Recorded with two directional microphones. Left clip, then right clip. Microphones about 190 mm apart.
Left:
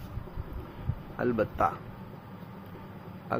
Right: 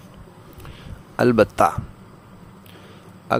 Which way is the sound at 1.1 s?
60° right (ahead or behind).